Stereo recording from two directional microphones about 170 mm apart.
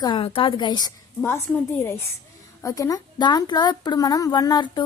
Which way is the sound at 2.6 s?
20° left (ahead or behind).